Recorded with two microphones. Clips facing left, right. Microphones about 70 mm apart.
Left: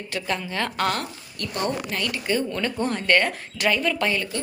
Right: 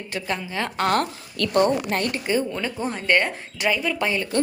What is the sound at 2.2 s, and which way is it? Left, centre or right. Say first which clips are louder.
Speech: right 1 dB; centre.